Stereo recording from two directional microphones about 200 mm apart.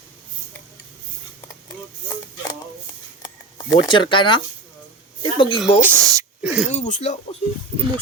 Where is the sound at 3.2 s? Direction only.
25° left (ahead or behind).